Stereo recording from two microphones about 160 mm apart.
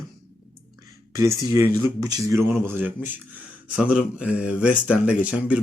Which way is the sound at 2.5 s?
10° right (ahead or behind).